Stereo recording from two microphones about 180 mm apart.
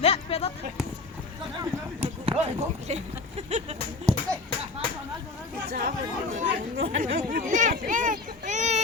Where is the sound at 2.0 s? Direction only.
30° right (ahead or behind).